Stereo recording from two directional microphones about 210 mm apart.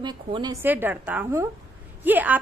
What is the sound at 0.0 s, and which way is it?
A woman's voice, 20° right (ahead or behind).